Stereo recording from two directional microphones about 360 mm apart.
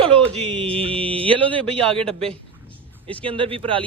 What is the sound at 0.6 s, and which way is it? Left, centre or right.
Music, centre.